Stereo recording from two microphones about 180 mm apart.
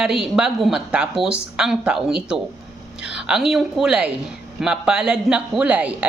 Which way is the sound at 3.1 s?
5° right (ahead or behind).